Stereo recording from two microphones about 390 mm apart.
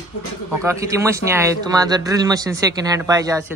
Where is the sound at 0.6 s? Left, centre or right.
Centre.